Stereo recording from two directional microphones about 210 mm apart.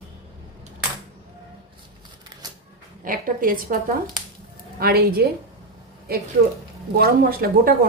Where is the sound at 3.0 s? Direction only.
40° right (ahead or behind).